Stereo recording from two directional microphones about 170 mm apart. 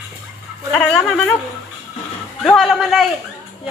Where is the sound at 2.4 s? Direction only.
Centre (ahead or behind).